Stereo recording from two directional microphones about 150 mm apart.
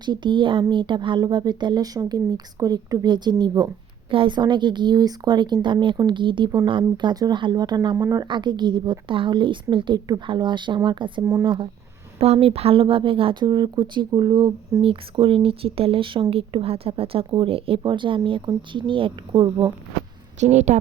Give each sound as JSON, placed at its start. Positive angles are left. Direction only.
{"t": 0.0, "sound": "speech", "side_deg": -30}
{"t": 11.2, "sound": "speech", "side_deg": -20}
{"t": 11.4, "sound": "speech", "side_deg": -35}
{"t": 20.4, "sound": "a woman's voice", "side_deg": -50}